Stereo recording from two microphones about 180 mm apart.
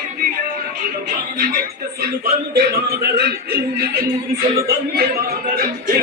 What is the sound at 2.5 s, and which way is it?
Speech, 60° right (ahead or behind).